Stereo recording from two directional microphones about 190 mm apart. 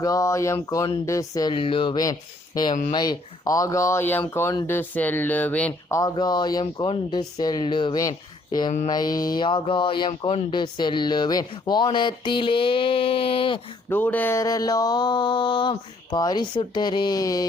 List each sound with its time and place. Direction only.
0.0 s speech: 15° left (ahead or behind)
6.0 s speech: 20° left (ahead or behind)
8.4 s a sound: 20° left (ahead or behind)
8.9 s speech: 20° left (ahead or behind)
13.9 s speech: 10° left (ahead or behind)